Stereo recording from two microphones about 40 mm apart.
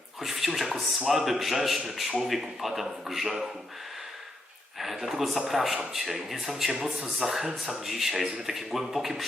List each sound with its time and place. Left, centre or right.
0.2 s a man's voice: centre
4.8 s a man's voice: centre
6.7 s speech: centre
7.2 s speech: centre